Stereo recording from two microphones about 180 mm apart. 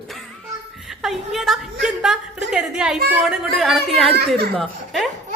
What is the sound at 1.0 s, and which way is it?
A woman's voice, centre (ahead or behind).